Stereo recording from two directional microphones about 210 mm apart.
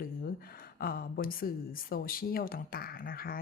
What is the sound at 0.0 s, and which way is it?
Speech, 45° left (ahead or behind).